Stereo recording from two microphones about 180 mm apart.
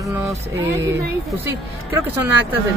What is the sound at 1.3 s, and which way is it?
Speech, 10° right (ahead or behind).